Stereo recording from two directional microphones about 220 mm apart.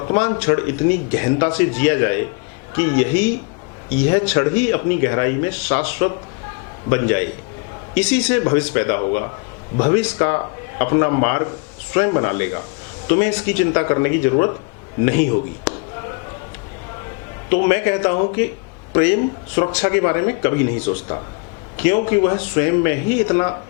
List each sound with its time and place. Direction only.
0.1 s speech: 15° left (ahead or behind)
17.5 s speech: 15° left (ahead or behind)
21.8 s speech: 15° left (ahead or behind)